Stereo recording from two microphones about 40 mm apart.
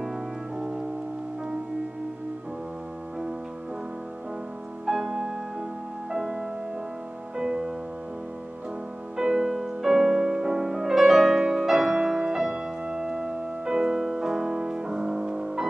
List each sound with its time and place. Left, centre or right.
0.0 s music: centre
4.8 s music: centre
9.1 s music: centre